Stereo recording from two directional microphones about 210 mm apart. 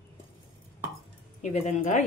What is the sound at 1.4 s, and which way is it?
Speech, 35° left (ahead or behind).